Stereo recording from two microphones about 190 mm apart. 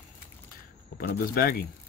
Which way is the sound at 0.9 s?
50° left (ahead or behind).